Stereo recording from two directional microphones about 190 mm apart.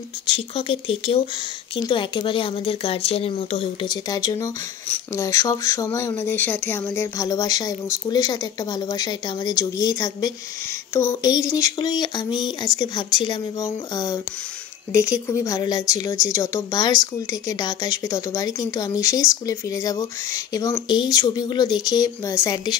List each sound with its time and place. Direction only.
0.3 s speech: 30° left (ahead or behind)